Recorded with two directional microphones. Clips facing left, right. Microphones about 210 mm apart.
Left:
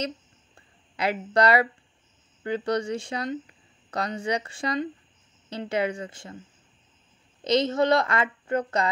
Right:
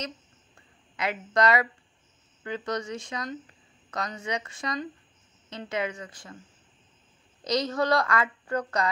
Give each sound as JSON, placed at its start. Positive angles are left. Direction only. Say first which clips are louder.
{"t": 0.9, "sound": "speech", "louder": "left 3 dB", "side_deg": 30}
{"t": 7.4, "sound": "a woman's voice", "louder": "left 4 dB", "side_deg": 25}